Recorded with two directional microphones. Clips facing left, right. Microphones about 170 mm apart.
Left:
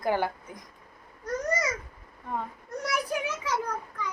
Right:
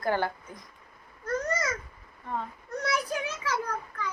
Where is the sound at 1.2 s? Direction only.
15° left (ahead or behind).